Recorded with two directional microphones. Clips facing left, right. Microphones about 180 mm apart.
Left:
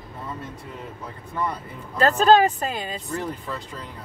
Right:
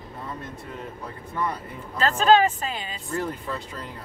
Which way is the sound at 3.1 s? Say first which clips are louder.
Right 4 dB; centre (ahead or behind).